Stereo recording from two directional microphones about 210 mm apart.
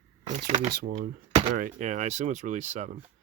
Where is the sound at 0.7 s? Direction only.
45° right (ahead or behind).